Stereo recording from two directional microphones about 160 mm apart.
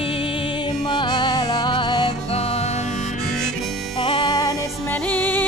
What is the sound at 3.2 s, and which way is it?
Harmonica, 5° left (ahead or behind).